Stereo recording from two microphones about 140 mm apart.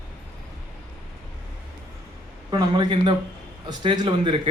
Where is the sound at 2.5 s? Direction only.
35° right (ahead or behind).